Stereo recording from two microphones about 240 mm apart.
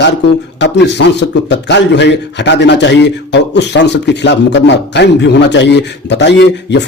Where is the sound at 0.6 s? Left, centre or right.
Left.